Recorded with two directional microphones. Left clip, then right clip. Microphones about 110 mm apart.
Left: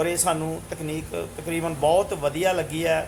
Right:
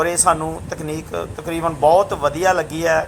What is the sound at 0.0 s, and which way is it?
A man's voice, 20° right (ahead or behind).